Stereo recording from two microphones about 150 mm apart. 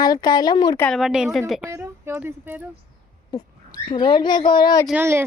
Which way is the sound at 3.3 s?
30° left (ahead or behind).